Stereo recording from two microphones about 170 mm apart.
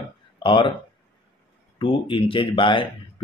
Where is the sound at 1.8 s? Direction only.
30° left (ahead or behind).